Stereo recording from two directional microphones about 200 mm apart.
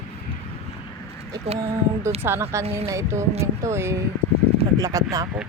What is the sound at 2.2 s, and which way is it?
Speech, 10° right (ahead or behind).